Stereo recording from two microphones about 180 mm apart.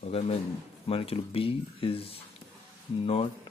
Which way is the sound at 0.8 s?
30° left (ahead or behind).